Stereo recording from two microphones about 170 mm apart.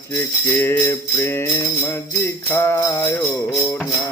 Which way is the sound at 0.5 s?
10° left (ahead or behind).